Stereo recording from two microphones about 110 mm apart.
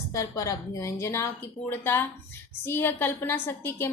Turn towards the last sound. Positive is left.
turn(degrees=20)  # may be behind; listen again after turning